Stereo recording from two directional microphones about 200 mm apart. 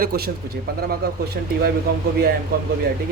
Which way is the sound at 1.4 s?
50° right (ahead or behind).